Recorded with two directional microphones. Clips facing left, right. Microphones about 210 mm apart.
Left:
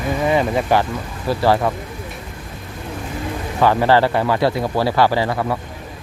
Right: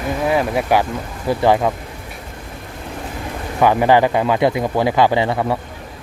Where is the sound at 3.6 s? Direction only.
15° right (ahead or behind).